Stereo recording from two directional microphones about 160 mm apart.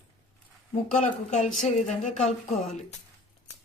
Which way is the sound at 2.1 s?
45° left (ahead or behind).